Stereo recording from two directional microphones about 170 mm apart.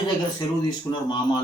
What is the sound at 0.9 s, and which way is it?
Speech, 25° left (ahead or behind).